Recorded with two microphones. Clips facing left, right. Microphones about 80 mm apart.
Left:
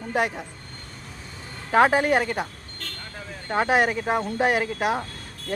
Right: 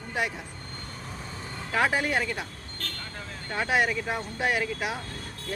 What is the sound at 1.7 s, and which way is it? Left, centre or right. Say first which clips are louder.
Speech: left 7 dB; left.